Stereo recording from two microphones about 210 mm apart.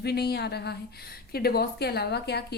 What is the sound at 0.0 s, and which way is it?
Speech, 50° left (ahead or behind).